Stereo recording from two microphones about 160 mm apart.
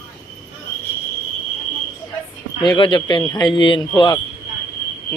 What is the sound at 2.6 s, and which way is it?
Speech, 30° left (ahead or behind).